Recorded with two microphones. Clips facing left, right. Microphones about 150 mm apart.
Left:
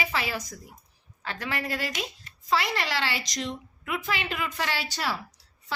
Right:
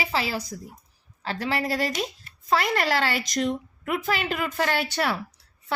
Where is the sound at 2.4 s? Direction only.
50° right (ahead or behind).